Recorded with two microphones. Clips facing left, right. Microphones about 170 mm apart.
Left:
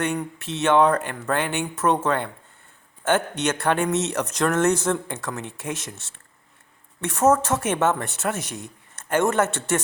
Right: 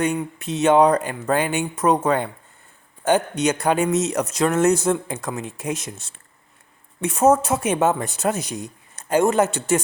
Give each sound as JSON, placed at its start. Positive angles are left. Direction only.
{"t": 0.0, "sound": "speech", "side_deg": -15}
{"t": 7.0, "sound": "speech", "side_deg": -10}